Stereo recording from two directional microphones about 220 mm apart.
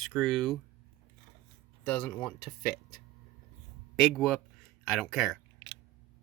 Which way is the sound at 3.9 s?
Centre (ahead or behind).